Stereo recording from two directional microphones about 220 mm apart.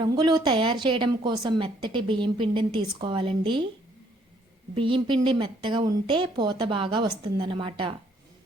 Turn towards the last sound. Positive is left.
turn(degrees=-25)  # may be behind; listen again after turning